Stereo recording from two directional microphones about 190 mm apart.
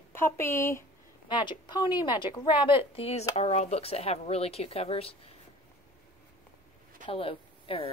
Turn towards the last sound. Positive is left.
turn(degrees=30)  # may be behind; listen again after turning